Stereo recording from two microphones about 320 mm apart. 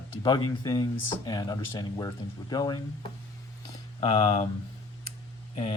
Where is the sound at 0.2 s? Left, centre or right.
Centre.